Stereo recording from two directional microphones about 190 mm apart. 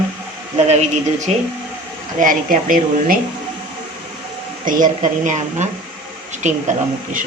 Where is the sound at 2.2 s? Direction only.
45° right (ahead or behind).